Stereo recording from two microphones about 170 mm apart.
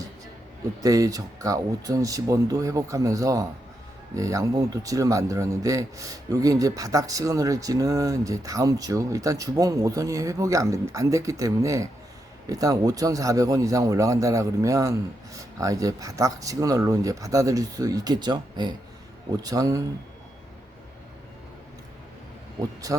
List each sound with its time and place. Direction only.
0.8 s speech: 20° right (ahead or behind)
22.9 s speech: 20° right (ahead or behind)